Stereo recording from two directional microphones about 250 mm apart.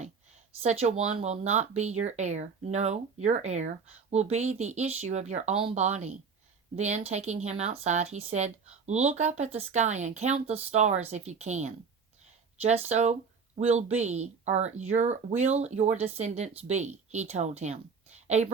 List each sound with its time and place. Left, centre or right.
0.6 s speech: right